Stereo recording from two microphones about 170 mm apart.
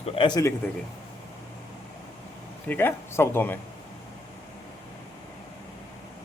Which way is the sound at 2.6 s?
10° left (ahead or behind).